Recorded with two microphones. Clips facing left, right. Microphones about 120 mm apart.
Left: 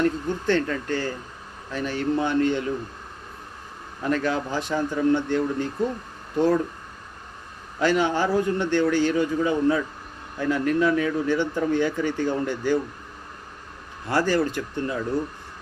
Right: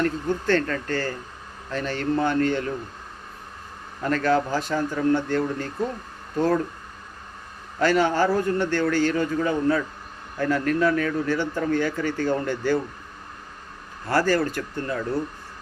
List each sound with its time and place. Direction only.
0.0 s a man's voice: 15° left (ahead or behind)
4.0 s a man's voice: 15° left (ahead or behind)
7.8 s a man's voice: 15° left (ahead or behind)
14.1 s a man's voice: 15° left (ahead or behind)